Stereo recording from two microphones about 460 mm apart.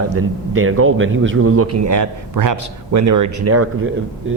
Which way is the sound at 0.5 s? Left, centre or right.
Right.